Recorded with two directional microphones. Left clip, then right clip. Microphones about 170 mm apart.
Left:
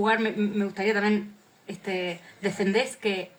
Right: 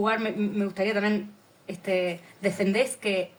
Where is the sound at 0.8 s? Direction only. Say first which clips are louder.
Left 1 dB; 40° right (ahead or behind).